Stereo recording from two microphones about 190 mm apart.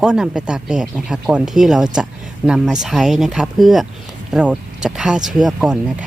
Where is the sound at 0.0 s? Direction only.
5° right (ahead or behind).